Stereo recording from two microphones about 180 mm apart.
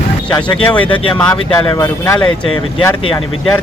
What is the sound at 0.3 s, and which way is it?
Speech, 25° left (ahead or behind).